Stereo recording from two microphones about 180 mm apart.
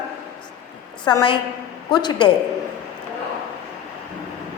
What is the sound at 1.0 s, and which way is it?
A woman's voice, 25° left (ahead or behind).